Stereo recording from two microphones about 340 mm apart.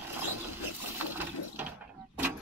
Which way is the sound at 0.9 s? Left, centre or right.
Centre.